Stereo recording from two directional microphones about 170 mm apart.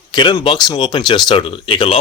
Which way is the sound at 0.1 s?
30° left (ahead or behind).